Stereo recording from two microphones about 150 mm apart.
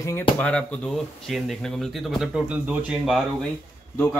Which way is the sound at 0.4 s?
5° left (ahead or behind).